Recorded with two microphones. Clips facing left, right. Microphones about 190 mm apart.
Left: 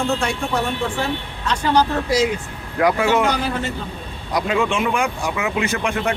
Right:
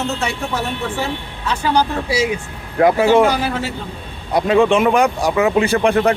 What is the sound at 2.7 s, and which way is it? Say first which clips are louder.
Speech: right 5 dB; 25° right (ahead or behind).